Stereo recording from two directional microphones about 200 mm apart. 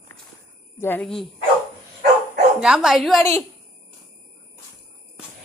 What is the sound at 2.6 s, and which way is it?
Speech, 5° right (ahead or behind).